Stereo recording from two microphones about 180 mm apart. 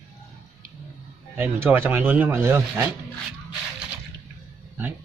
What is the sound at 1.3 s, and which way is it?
Speech, 10° right (ahead or behind).